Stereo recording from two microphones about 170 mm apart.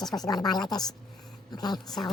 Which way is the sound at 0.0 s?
25° left (ahead or behind).